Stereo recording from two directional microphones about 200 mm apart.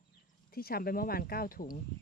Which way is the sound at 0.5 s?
50° left (ahead or behind).